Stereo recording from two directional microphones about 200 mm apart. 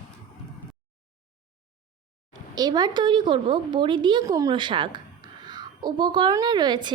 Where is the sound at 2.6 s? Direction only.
20° right (ahead or behind).